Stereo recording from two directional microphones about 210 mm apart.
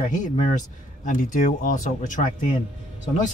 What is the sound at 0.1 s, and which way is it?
Speech, 35° left (ahead or behind).